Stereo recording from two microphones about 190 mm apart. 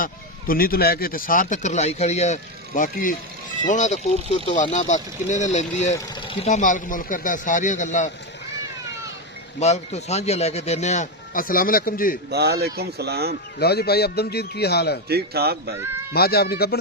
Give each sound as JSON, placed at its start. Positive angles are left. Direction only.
{"t": 0.0, "sound": "speech", "side_deg": 50}
{"t": 9.6, "sound": "speech", "side_deg": 35}
{"t": 12.3, "sound": "speech", "side_deg": -55}
{"t": 13.6, "sound": "a man's voice", "side_deg": 55}
{"t": 15.1, "sound": "speech", "side_deg": -55}
{"t": 16.1, "sound": "a man's voice", "side_deg": 55}